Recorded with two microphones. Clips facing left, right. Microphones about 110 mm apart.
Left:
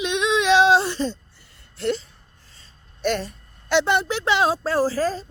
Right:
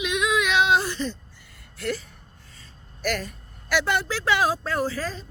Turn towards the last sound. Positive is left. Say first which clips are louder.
# left 6 dB
turn(degrees=35)  # may be behind; listen again after turning